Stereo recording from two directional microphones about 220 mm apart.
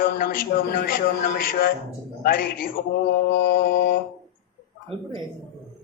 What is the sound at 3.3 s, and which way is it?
Mantra, 50° left (ahead or behind).